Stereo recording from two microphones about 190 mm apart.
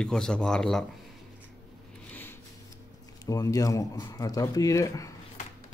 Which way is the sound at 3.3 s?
20° left (ahead or behind).